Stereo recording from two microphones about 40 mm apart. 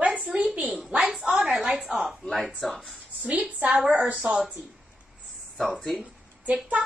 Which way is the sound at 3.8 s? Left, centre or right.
Right.